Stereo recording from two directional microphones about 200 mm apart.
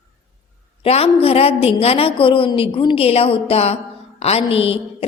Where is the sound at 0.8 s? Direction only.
30° left (ahead or behind).